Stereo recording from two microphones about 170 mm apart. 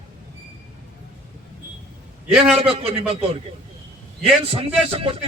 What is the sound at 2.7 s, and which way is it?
A man's voice, 35° right (ahead or behind).